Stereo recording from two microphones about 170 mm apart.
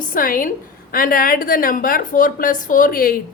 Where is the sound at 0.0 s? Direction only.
55° left (ahead or behind).